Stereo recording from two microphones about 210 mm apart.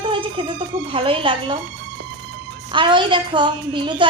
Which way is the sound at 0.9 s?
25° right (ahead or behind).